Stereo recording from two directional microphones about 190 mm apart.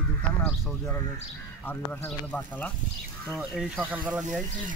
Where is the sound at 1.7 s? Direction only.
10° left (ahead or behind).